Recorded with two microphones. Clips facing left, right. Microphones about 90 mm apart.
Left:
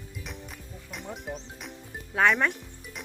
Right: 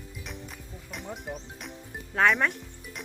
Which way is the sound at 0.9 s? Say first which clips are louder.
Even; centre (ahead or behind).